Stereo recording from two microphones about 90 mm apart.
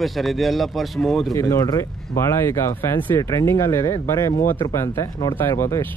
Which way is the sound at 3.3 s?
35° left (ahead or behind).